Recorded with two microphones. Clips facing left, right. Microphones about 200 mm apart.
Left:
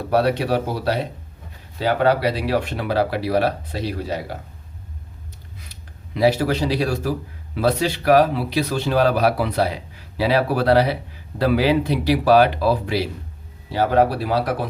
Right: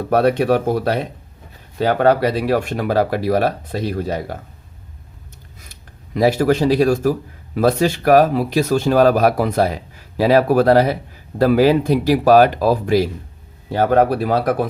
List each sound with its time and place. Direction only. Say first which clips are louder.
0.1 s speech: right 4 dB; 50° right (ahead or behind)
6.1 s speech: right 3 dB; 50° right (ahead or behind)